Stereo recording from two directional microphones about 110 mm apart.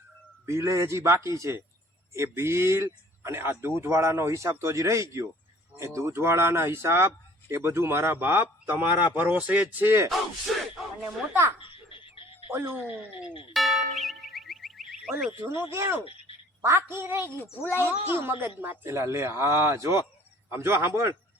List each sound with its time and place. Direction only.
0.4 s speech: 25° right (ahead or behind)
10.1 s a sound: centre (ahead or behind)
11.0 s speech: 25° right (ahead or behind)
11.6 s dog: 50° left (ahead or behind)
12.5 s speech: 20° right (ahead or behind)
13.5 s car alarm: centre (ahead or behind)
15.3 s speech: 25° right (ahead or behind)